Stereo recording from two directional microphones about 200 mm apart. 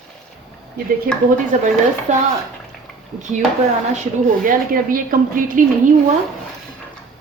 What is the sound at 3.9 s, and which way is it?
A woman's voice, 40° right (ahead or behind).